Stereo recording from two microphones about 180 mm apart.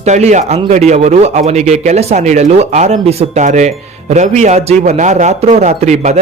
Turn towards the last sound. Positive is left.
turn(degrees=-40)  # may be behind; listen again after turning